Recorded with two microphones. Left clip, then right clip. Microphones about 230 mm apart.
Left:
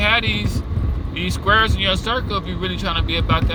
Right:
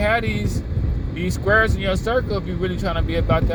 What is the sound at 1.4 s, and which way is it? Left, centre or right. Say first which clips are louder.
Speech: left 2 dB; left.